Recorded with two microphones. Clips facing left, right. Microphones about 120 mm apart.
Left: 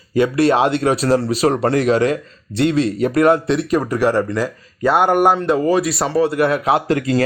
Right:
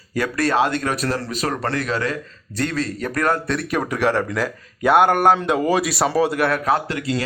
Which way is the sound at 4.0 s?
10° left (ahead or behind).